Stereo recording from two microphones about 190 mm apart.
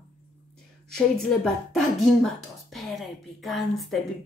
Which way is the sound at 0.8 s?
5° left (ahead or behind).